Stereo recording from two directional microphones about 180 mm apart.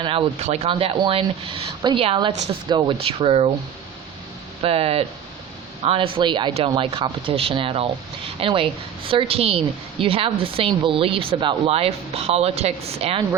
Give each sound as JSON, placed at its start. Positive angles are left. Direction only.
{"t": 0.0, "sound": "speech", "side_deg": -30}
{"t": 4.6, "sound": "speech", "side_deg": -35}